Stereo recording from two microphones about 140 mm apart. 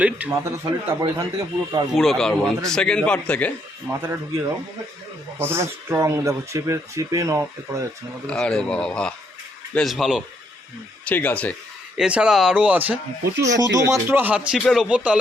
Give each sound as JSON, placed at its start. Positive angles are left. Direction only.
{"t": 0.3, "sound": "speech", "side_deg": -20}
{"t": 2.0, "sound": "speech", "side_deg": 5}
{"t": 3.8, "sound": "speech", "side_deg": -15}
{"t": 8.3, "sound": "speech", "side_deg": 5}
{"t": 11.0, "sound": "speech", "side_deg": 10}
{"t": 11.9, "sound": "speech", "side_deg": -5}
{"t": 13.4, "sound": "speech", "side_deg": -25}